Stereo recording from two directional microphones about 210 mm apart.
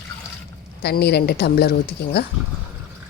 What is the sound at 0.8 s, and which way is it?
A woman's voice, 50° left (ahead or behind).